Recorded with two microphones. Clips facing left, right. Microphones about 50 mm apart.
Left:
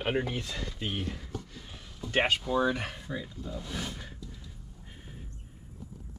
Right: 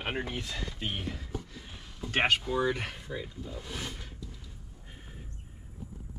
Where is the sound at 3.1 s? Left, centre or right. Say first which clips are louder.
Left 2 dB; centre.